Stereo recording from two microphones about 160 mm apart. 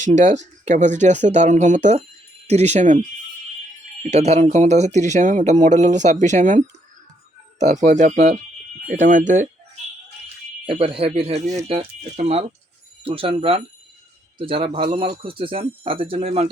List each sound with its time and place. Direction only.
0.0 s speech: 50° right (ahead or behind)
4.1 s speech: 45° right (ahead or behind)
7.6 s speech: 50° right (ahead or behind)
10.7 s speech: 35° right (ahead or behind)